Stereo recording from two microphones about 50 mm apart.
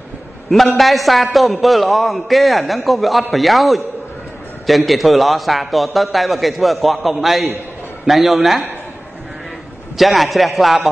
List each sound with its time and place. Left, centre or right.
0.7 s a man's voice: centre
9.9 s a man's voice: centre